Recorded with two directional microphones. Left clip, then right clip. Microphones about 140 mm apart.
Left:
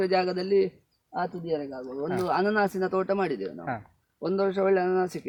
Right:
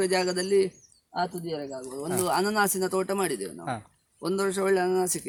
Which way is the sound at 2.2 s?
10° right (ahead or behind).